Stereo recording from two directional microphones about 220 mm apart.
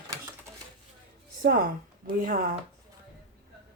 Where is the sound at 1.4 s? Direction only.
40° right (ahead or behind).